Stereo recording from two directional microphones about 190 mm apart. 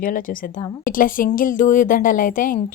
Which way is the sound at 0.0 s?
45° left (ahead or behind).